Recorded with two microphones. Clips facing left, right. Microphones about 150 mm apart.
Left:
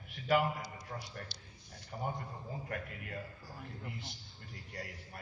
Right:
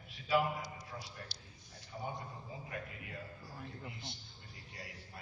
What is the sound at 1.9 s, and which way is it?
Speech, 65° left (ahead or behind).